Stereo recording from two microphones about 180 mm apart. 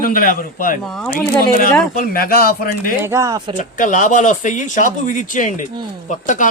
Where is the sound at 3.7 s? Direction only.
45° left (ahead or behind).